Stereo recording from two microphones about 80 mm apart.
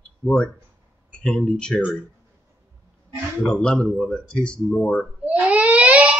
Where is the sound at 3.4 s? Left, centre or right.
Centre.